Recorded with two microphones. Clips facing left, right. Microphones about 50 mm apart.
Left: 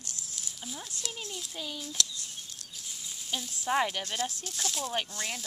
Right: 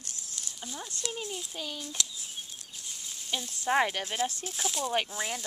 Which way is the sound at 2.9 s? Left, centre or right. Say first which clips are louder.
Right 1 dB; centre.